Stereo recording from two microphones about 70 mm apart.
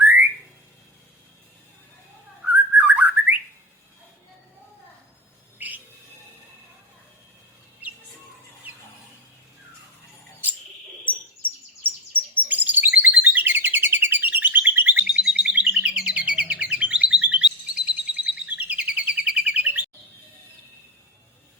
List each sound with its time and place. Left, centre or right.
0.0 s whistling: right
2.4 s bird: right
5.5 s bird: right
11.9 s chirp: right
15.0 s chirp: centre